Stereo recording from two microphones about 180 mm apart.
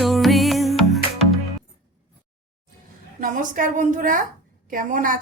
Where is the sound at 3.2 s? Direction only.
45° right (ahead or behind).